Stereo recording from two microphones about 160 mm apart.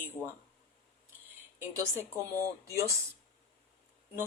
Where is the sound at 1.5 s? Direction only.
15° right (ahead or behind).